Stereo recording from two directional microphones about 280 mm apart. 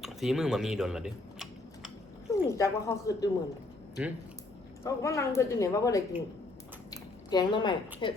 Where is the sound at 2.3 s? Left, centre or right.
Centre.